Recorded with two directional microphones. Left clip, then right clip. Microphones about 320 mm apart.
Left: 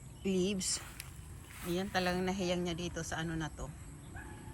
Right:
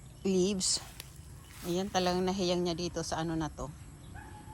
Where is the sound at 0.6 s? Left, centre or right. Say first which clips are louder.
Right 6 dB; right.